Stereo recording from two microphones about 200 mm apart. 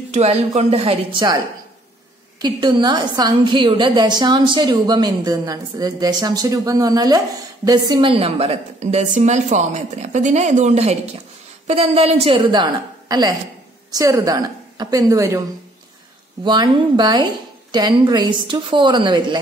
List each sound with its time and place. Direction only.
0.1 s a woman's voice: 30° right (ahead or behind)
2.4 s a woman's voice: 20° right (ahead or behind)
16.4 s a woman's voice: 20° right (ahead or behind)